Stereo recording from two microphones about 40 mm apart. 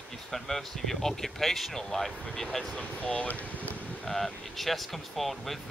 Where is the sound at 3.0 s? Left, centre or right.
Left.